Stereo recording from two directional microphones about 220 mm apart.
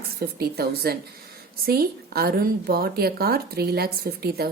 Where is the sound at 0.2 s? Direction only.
45° right (ahead or behind).